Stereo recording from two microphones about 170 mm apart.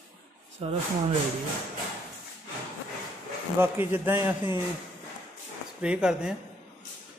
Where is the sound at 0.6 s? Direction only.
35° right (ahead or behind).